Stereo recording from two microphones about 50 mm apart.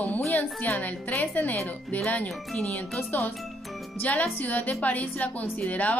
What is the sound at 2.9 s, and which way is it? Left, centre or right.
Speech, left.